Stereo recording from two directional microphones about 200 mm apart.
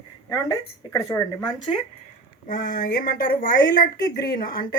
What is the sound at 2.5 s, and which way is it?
Speech, 45° left (ahead or behind).